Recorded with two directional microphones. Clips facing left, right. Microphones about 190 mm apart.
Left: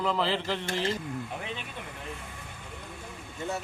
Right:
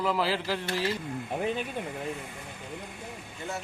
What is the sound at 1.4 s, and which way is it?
Speech, 45° right (ahead or behind).